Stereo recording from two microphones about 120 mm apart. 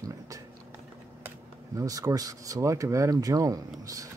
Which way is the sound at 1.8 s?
30° right (ahead or behind).